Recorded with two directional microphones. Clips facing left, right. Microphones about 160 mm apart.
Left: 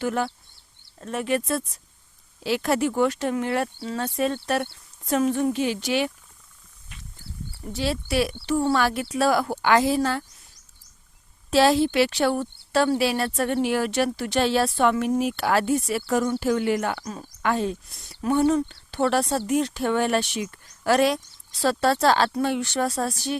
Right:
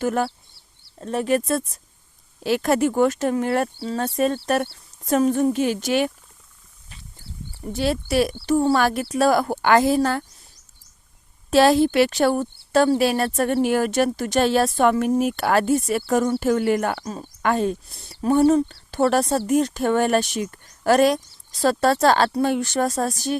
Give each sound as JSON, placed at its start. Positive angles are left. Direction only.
{"t": 0.0, "sound": "a woman's voice", "side_deg": -45}
{"t": 0.9, "sound": "a woman's voice", "side_deg": -35}
{"t": 6.9, "sound": "wild animals", "side_deg": -35}
{"t": 7.7, "sound": "a woman's voice", "side_deg": -50}
{"t": 11.5, "sound": "a woman's voice", "side_deg": -50}
{"t": 17.8, "sound": "a woman's voice", "side_deg": -30}